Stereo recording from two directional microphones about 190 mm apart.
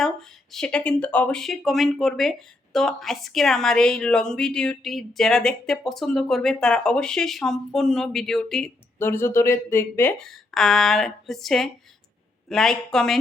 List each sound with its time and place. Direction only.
0.0 s a woman's voice: centre (ahead or behind)
9.0 s a woman's voice: 10° left (ahead or behind)